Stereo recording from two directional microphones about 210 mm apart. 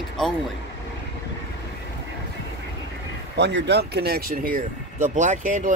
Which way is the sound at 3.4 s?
55° right (ahead or behind).